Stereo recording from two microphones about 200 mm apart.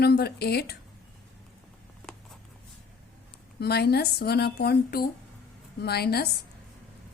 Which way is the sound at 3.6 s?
55° left (ahead or behind).